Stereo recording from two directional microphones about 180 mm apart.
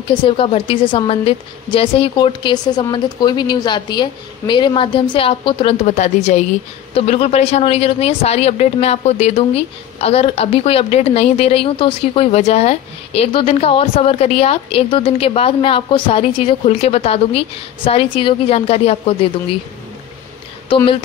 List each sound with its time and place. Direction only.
0.1 s a woman's voice: 30° left (ahead or behind)
20.7 s a woman's voice: 30° left (ahead or behind)